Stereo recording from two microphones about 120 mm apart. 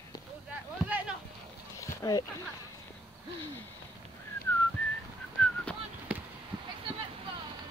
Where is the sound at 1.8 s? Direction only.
30° left (ahead or behind).